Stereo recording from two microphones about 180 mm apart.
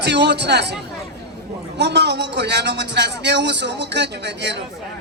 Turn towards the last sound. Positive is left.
turn(degrees=-75)  # may be behind; listen again after turning